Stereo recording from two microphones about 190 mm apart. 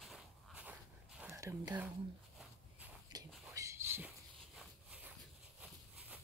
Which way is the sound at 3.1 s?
20° right (ahead or behind).